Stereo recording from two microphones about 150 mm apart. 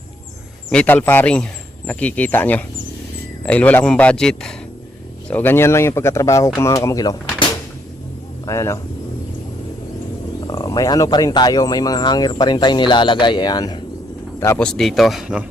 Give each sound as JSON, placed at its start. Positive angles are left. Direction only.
{"t": 0.7, "sound": "a man's voice", "side_deg": 10}
{"t": 8.4, "sound": "speech", "side_deg": 20}
{"t": 10.4, "sound": "speech", "side_deg": 25}
{"t": 14.3, "sound": "speech", "side_deg": 15}